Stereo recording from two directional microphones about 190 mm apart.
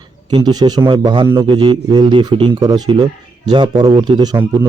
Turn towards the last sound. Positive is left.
turn(degrees=-20)  # may be behind; listen again after turning